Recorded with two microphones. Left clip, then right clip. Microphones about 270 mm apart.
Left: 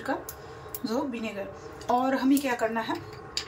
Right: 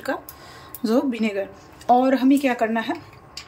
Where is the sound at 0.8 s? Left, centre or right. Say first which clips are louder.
Right 9 dB; right.